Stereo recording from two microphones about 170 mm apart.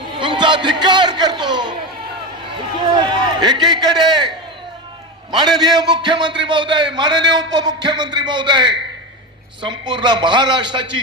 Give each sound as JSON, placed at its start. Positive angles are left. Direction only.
{"t": 0.2, "sound": "a man's voice", "side_deg": -30}
{"t": 2.8, "sound": "a man's voice", "side_deg": -30}
{"t": 5.3, "sound": "a man's voice", "side_deg": -25}